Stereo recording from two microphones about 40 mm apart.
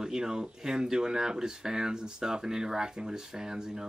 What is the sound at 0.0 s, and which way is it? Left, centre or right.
Speech, centre.